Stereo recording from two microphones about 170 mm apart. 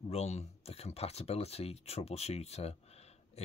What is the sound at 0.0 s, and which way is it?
Speech, 40° left (ahead or behind).